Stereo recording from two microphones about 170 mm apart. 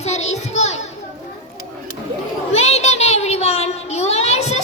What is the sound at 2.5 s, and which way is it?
Child singing, 40° left (ahead or behind).